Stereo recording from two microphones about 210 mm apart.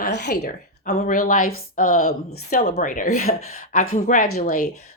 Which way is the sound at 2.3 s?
50° left (ahead or behind).